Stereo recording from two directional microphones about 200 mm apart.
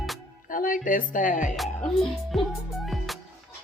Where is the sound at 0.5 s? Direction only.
45° left (ahead or behind).